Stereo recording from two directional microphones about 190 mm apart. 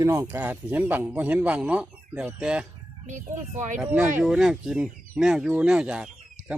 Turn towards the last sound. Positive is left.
turn(degrees=-5)  # may be behind; listen again after turning